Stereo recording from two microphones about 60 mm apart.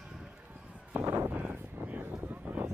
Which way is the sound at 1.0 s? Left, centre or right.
Right.